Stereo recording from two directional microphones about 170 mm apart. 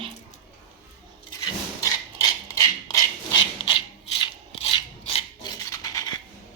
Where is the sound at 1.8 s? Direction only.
20° left (ahead or behind).